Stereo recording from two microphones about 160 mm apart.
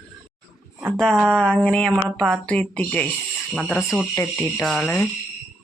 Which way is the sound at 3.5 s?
Centre (ahead or behind).